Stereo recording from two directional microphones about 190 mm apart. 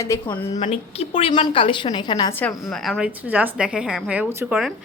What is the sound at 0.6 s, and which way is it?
A woman's voice, 30° left (ahead or behind).